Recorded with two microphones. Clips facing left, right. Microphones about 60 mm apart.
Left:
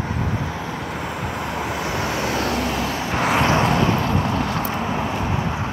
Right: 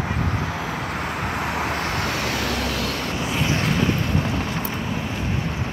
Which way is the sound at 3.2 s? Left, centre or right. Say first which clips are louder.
Left 9 dB; left.